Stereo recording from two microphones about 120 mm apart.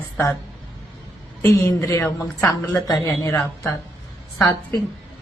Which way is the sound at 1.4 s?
25° left (ahead or behind).